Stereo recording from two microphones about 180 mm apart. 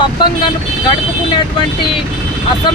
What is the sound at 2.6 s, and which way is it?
Speech, 25° left (ahead or behind).